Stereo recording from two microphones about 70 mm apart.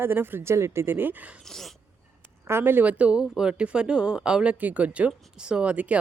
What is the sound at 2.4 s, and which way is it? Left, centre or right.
Speech, right.